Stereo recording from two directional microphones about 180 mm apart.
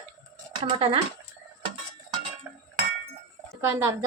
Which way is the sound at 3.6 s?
15° right (ahead or behind).